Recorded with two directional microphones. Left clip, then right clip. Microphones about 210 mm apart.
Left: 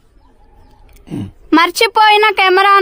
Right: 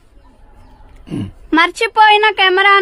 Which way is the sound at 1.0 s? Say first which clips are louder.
Right 1 dB; 15° left (ahead or behind).